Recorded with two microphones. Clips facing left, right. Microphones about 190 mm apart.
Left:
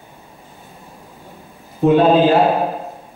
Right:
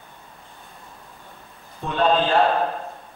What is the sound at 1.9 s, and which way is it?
Speech, 10° left (ahead or behind).